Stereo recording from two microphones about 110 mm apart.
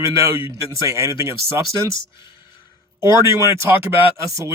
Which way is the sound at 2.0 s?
45° left (ahead or behind).